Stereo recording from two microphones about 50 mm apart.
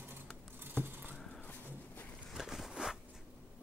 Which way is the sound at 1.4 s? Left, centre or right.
Left.